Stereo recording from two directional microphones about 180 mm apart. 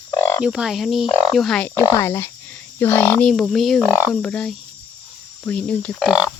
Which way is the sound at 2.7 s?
10° left (ahead or behind).